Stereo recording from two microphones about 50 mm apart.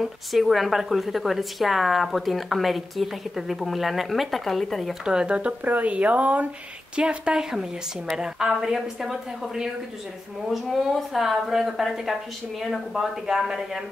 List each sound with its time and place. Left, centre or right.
0.3 s speech: centre
5.0 s speech: centre
5.6 s speech: right
8.1 s speech: centre